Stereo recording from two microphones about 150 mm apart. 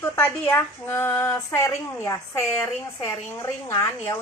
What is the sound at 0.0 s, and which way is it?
Speech, 15° left (ahead or behind).